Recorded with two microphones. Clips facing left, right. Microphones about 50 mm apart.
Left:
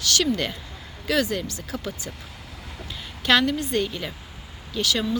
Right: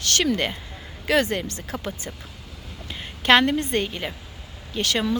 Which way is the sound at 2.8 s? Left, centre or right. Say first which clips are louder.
Right 3 dB; right.